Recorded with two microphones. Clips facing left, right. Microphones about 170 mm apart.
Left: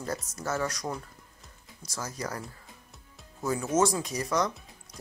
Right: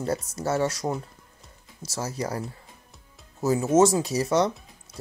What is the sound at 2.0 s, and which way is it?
Speech, 30° right (ahead or behind).